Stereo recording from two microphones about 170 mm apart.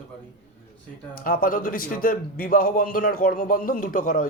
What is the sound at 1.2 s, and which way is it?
A man's voice, 55° left (ahead or behind).